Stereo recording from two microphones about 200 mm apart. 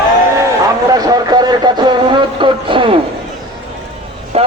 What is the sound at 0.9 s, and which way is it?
Speech, 20° right (ahead or behind).